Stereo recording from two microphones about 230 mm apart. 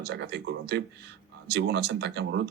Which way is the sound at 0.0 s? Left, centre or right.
Right.